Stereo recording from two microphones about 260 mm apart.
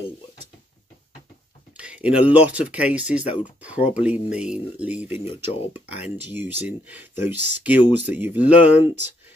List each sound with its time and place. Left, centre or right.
1.8 s speech: centre
5.2 s speech: centre
5.7 s speech: centre